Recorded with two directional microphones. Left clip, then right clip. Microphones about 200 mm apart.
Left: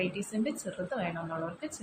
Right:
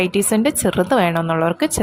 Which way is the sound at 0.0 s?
55° right (ahead or behind).